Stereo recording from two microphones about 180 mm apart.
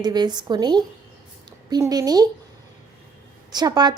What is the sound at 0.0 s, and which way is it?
A woman's voice, 25° right (ahead or behind).